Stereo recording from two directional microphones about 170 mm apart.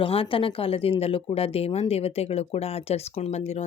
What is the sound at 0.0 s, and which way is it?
Speech, 30° left (ahead or behind).